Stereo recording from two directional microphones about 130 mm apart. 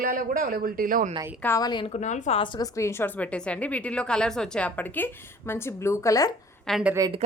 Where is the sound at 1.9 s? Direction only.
65° left (ahead or behind).